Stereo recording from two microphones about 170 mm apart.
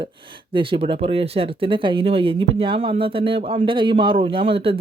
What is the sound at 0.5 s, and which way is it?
Speech, 30° right (ahead or behind).